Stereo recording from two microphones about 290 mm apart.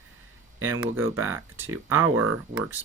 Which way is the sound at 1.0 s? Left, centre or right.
Centre.